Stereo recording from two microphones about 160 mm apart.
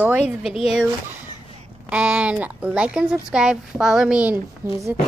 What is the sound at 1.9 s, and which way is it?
Speech, 10° right (ahead or behind).